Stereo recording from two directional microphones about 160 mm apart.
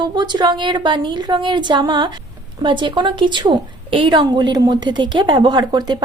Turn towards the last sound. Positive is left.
turn(degrees=-25)  # may be behind; listen again after turning